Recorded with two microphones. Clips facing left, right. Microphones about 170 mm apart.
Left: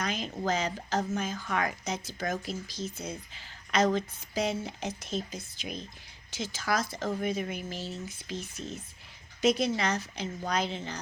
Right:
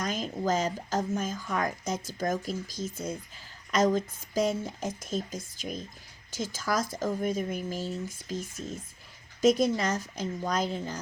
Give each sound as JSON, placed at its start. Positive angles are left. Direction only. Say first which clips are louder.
{"t": 0.0, "sound": "speech", "louder": "right 2 dB", "side_deg": -45}